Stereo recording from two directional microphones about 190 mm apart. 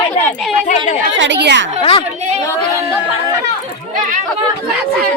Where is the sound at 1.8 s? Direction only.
30° left (ahead or behind).